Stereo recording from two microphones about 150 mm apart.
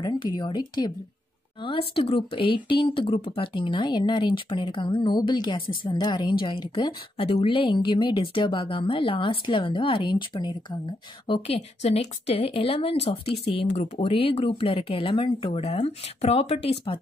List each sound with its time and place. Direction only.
0.0 s speech: 30° left (ahead or behind)
7.2 s speech: 40° left (ahead or behind)